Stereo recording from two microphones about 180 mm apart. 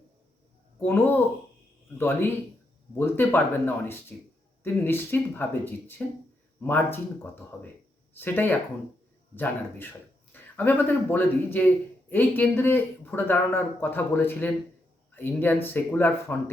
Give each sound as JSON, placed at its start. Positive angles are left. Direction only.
{"t": 0.8, "sound": "speech", "side_deg": 10}
{"t": 8.1, "sound": "speech", "side_deg": 10}